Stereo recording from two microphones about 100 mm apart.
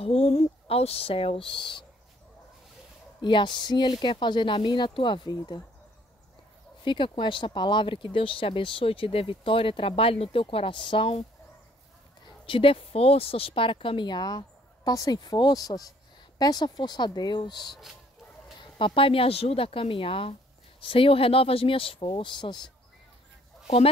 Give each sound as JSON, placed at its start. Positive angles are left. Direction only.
{"t": 0.0, "sound": "speech", "side_deg": 90}
{"t": 3.2, "sound": "speech", "side_deg": 50}
{"t": 6.8, "sound": "speech", "side_deg": 50}
{"t": 12.4, "sound": "speech", "side_deg": 65}
{"t": 18.6, "sound": "speech", "side_deg": 60}